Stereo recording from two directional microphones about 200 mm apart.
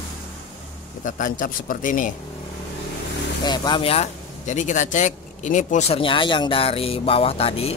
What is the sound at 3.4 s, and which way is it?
Speech, 20° left (ahead or behind).